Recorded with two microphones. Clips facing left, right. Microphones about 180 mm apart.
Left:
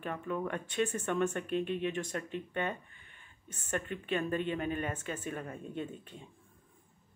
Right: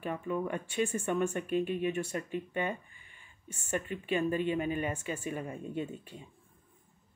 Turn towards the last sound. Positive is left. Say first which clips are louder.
# right 3 dB
turn(degrees=-10)  # may be behind; listen again after turning